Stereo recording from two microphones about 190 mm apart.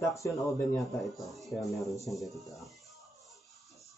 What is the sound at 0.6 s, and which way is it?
Speech, centre (ahead or behind).